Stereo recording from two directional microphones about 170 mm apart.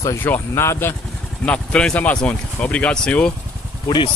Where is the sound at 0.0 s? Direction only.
15° left (ahead or behind).